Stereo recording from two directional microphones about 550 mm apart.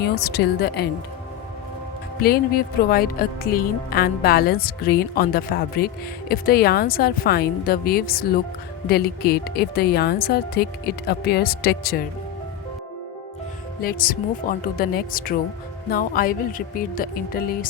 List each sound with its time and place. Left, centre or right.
0.0 s speech: centre
2.2 s speech: centre
13.8 s speech: centre